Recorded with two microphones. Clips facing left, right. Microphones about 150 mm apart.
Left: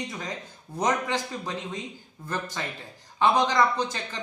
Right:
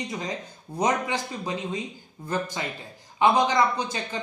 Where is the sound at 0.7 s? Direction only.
15° right (ahead or behind).